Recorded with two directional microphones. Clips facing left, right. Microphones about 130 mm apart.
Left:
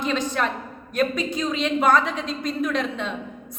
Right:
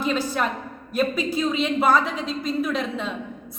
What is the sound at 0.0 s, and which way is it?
Speech, 5° right (ahead or behind).